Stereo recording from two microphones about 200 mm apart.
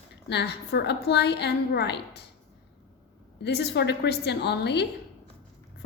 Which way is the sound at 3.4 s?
55° left (ahead or behind).